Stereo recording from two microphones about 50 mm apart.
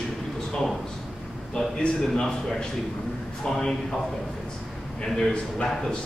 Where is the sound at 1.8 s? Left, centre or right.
Centre.